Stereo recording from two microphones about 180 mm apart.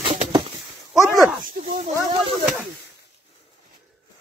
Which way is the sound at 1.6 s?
40° right (ahead or behind).